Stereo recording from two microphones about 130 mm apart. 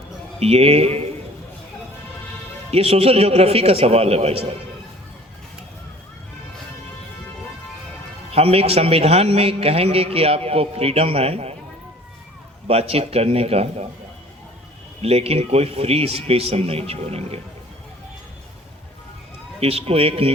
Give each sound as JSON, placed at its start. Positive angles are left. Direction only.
{"t": 0.3, "sound": "a man's voice", "side_deg": -50}
{"t": 2.6, "sound": "a man's voice", "side_deg": -50}
{"t": 8.3, "sound": "a man's voice", "side_deg": -50}
{"t": 12.6, "sound": "a man's voice", "side_deg": -50}
{"t": 15.0, "sound": "a man's voice", "side_deg": -50}
{"t": 19.5, "sound": "a man's voice", "side_deg": -50}